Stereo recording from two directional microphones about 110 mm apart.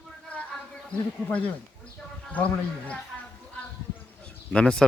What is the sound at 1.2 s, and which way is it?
Speech, 15° left (ahead or behind).